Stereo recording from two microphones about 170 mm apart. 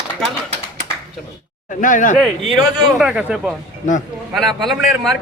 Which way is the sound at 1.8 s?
50° left (ahead or behind).